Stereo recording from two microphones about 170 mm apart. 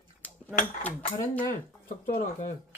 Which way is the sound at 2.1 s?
50° left (ahead or behind).